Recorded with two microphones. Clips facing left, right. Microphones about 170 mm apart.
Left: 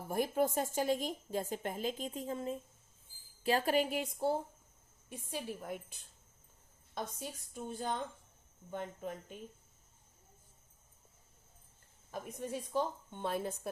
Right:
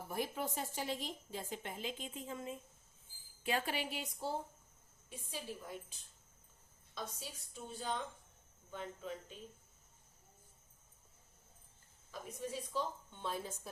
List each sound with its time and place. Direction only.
0.1 s a woman's voice: 45° left (ahead or behind)
12.1 s a woman's voice: 55° left (ahead or behind)